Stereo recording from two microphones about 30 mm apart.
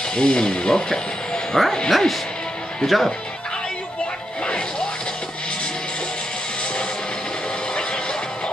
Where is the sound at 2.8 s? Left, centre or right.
Centre.